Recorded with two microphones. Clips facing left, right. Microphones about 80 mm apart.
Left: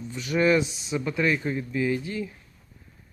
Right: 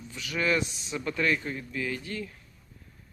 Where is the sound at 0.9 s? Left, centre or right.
Centre.